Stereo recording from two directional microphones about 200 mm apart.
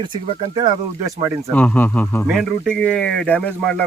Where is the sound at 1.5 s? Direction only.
5° left (ahead or behind).